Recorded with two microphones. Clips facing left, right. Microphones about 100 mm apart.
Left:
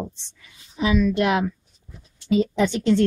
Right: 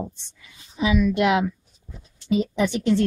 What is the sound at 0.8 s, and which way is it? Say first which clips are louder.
Speech: even; 15° right (ahead or behind).